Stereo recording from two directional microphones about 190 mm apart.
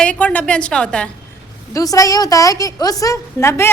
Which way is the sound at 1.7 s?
15° left (ahead or behind).